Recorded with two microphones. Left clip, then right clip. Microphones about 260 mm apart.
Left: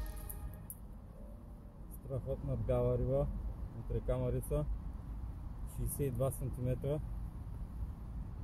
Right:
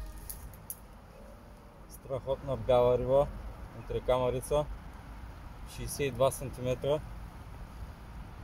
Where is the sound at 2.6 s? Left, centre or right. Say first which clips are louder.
Right 10 dB; centre.